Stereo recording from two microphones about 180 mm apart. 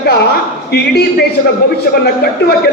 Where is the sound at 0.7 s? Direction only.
65° left (ahead or behind).